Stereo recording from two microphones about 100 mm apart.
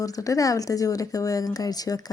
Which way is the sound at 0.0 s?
35° left (ahead or behind).